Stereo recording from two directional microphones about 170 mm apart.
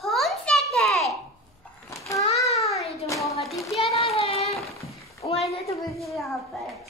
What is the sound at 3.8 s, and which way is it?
Child singing, 35° left (ahead or behind).